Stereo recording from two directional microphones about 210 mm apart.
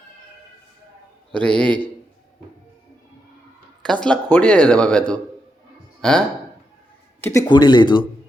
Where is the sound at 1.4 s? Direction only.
5° left (ahead or behind).